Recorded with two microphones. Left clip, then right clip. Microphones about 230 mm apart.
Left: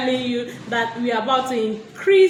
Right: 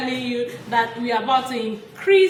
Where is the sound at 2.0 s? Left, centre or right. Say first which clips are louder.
Left 1 dB; centre.